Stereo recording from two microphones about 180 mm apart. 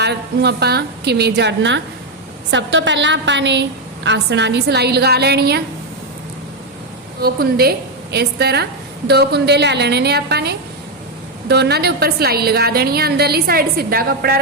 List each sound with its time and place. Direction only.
0.0 s a woman's voice: 70° right (ahead or behind)
7.2 s a woman's voice: 60° right (ahead or behind)